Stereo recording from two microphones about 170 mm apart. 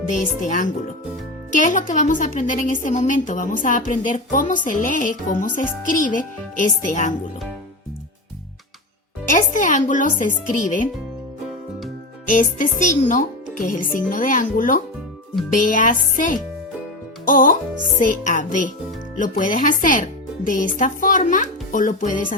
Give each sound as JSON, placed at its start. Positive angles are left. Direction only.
{"t": 0.1, "sound": "a woman's voice", "side_deg": 45}
{"t": 9.3, "sound": "a woman's voice", "side_deg": 50}
{"t": 12.2, "sound": "a woman's voice", "side_deg": 50}